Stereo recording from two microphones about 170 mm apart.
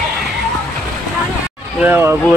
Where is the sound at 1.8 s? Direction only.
15° right (ahead or behind).